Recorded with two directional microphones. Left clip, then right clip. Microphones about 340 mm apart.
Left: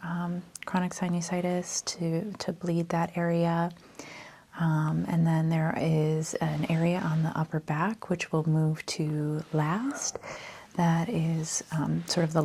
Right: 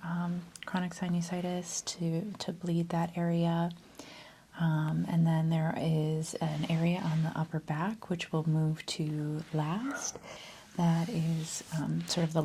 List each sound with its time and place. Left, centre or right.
0.0 s speech: left